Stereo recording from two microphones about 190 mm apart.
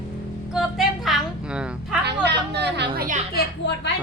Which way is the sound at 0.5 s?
Centre (ahead or behind).